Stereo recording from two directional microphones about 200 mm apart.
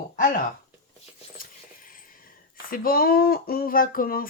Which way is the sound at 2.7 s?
45° left (ahead or behind).